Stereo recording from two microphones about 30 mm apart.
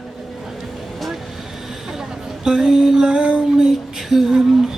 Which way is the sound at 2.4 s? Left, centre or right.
Centre.